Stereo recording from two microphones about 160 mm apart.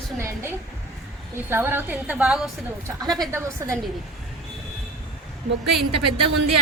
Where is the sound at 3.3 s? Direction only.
15° right (ahead or behind).